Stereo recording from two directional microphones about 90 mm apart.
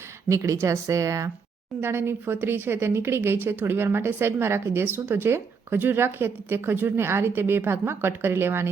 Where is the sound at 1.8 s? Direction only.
25° right (ahead or behind).